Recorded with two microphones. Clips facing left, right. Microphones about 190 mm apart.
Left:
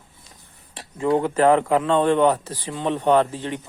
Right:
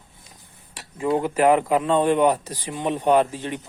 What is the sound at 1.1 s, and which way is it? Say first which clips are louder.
Speech: left 1 dB; 10° right (ahead or behind).